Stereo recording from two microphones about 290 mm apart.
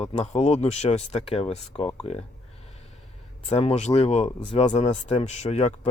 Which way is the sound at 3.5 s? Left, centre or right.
Left.